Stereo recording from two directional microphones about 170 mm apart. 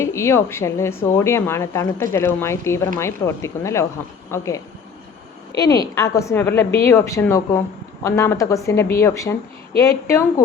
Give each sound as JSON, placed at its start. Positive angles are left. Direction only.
{"t": 0.0, "sound": "speech", "side_deg": 15}